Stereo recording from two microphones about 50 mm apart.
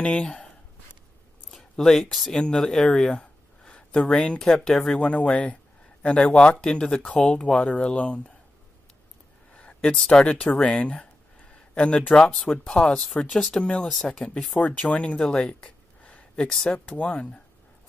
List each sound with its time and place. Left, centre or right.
0.0 s speech: left
1.5 s speech: centre
2.4 s a sound: centre
4.0 s speech: left
9.5 s a sound: left
10.0 s speech: left
13.6 s speech: left
13.8 s speech: centre
14.6 s speech: left
16.7 s speech: left
17.0 s speech: left